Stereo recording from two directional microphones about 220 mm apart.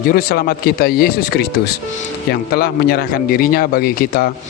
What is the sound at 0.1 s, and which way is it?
Speech, 45° left (ahead or behind).